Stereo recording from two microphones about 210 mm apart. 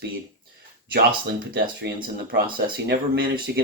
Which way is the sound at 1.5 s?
50° right (ahead or behind).